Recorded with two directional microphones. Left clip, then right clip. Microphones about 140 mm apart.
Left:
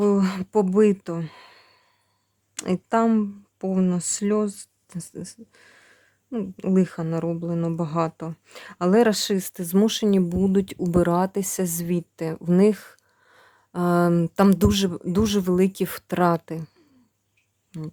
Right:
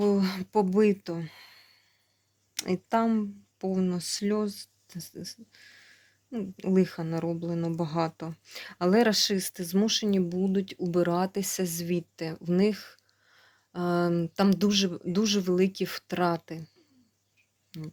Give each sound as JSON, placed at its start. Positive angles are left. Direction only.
{"t": 0.0, "sound": "a sound", "side_deg": 40}
{"t": 2.6, "sound": "speech", "side_deg": 30}
{"t": 14.8, "sound": "speech", "side_deg": 30}
{"t": 17.7, "sound": "speech", "side_deg": 30}